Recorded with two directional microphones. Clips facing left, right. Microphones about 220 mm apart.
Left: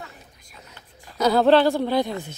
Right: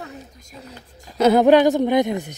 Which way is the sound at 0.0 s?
40° right (ahead or behind).